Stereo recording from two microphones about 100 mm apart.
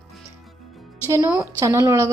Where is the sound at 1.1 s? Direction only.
30° right (ahead or behind).